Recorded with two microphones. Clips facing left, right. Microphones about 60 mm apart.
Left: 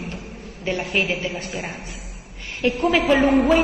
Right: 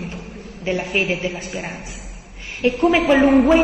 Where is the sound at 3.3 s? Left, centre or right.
Right.